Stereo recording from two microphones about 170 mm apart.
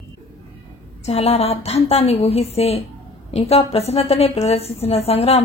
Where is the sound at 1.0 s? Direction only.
35° left (ahead or behind).